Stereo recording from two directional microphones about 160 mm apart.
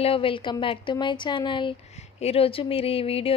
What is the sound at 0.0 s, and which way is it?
A woman's voice, 35° left (ahead or behind).